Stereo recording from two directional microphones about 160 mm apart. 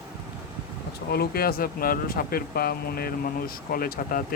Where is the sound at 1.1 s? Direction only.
75° left (ahead or behind).